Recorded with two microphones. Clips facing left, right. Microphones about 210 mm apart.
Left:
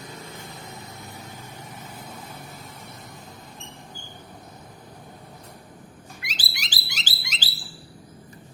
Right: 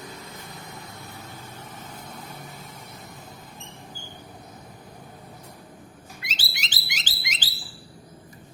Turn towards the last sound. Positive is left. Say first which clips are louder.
# even
turn(degrees=-15)  # may be behind; listen again after turning